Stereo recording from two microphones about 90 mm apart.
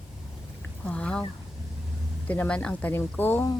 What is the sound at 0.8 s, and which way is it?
Speech, 10° left (ahead or behind).